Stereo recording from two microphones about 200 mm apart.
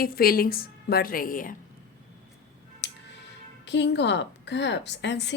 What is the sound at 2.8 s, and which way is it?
Music, 60° left (ahead or behind).